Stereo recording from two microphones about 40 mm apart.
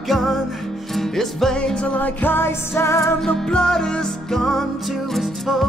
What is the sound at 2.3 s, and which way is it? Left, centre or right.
Music, left.